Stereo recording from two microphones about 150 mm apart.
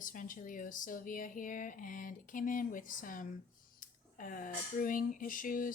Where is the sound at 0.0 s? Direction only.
65° left (ahead or behind).